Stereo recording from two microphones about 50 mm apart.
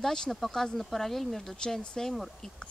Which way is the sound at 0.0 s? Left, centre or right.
Centre.